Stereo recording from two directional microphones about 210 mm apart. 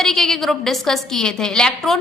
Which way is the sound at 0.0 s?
Centre (ahead or behind).